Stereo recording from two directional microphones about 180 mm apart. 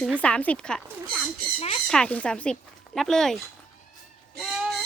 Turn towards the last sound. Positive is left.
turn(degrees=0)  # may be behind; listen again after turning